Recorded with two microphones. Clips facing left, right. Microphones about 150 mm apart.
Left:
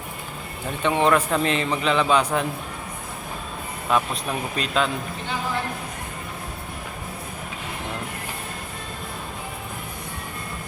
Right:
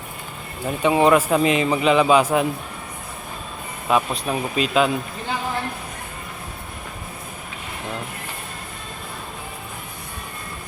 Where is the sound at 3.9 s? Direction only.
5° right (ahead or behind).